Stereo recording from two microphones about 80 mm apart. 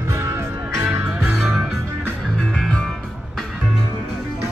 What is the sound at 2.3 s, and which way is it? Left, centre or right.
Music, centre.